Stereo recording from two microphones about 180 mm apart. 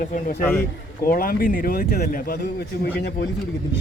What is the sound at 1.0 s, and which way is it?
Speech, 55° left (ahead or behind).